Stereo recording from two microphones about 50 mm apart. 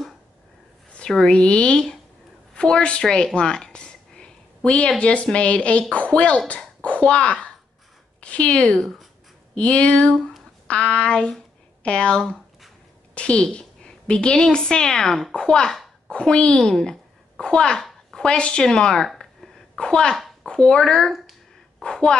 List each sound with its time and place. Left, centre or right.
0.9 s a woman's voice: centre
19.1 s a sound: centre
19.9 s speech: centre